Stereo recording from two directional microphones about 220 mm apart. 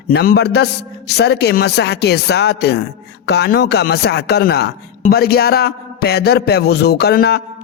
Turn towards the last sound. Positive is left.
turn(degrees=45)  # may be behind; listen again after turning